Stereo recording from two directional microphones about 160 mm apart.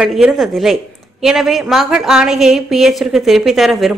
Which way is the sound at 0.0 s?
Centre (ahead or behind).